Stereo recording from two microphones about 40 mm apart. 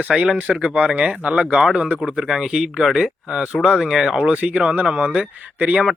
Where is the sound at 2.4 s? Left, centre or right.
Centre.